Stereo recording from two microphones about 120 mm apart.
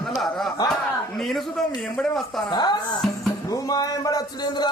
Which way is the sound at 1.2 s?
Centre (ahead or behind).